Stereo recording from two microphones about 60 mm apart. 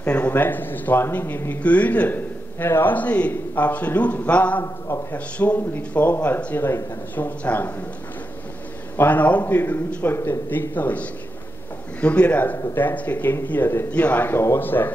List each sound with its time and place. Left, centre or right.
0.0 s speech: left
1.6 s a man's voice: left
8.9 s a man's voice: left
10.7 s a man's voice: left